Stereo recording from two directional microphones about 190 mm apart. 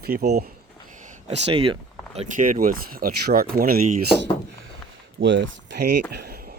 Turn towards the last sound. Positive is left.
turn(degrees=-60)  # may be behind; listen again after turning